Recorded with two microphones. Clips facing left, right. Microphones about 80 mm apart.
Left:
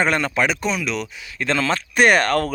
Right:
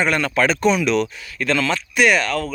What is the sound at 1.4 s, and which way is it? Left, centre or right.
Speech, left.